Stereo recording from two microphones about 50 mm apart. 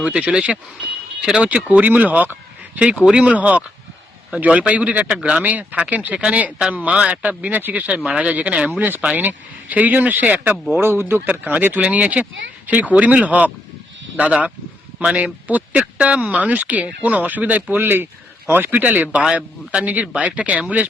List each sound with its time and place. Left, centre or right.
0.0 s speech: centre
1.8 s speech: right
3.0 s speech: right
11.3 s speech: right
11.8 s speech: right
17.8 s speech: right